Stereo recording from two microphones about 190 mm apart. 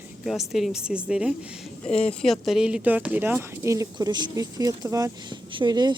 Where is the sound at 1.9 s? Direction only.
30° left (ahead or behind).